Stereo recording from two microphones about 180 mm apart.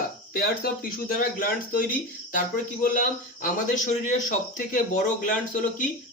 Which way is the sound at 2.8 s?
50° left (ahead or behind).